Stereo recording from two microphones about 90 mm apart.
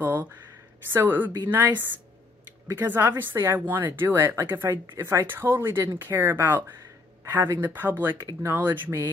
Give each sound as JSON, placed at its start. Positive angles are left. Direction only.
{"t": 0.0, "sound": "speech", "side_deg": -20}
{"t": 8.3, "sound": "speech", "side_deg": -35}
{"t": 8.5, "sound": "speech", "side_deg": -25}